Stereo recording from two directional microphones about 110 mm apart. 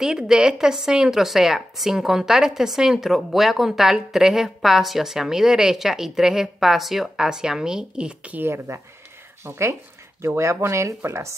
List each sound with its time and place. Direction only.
0.0 s a woman's voice: 5° right (ahead or behind); by 11.3 s 25° right (ahead or behind)